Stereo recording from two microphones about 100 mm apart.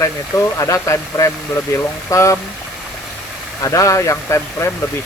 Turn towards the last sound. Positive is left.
turn(degrees=30)  # may be behind; listen again after turning